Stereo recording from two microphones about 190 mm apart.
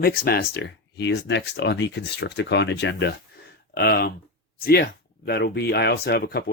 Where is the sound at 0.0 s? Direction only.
55° left (ahead or behind).